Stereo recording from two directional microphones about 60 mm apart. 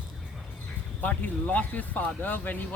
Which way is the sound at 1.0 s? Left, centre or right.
Left.